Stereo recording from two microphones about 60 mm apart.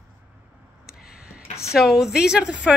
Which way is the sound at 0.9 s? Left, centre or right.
Centre.